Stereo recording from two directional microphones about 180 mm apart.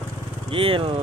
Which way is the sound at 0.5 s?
30° right (ahead or behind).